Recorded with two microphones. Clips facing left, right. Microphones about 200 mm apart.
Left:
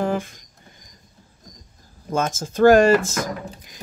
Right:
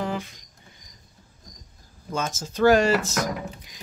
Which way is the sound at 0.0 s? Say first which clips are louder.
Left 6 dB; 50° left (ahead or behind).